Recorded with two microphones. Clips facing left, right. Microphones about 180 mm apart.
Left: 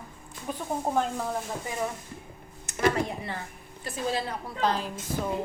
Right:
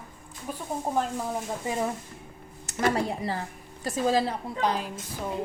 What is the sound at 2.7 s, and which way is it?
Speech, 35° right (ahead or behind).